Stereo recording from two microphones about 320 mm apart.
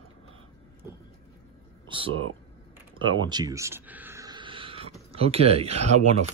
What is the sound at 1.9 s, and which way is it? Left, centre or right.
Speech, centre.